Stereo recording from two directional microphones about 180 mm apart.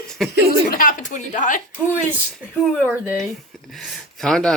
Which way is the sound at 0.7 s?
50° left (ahead or behind).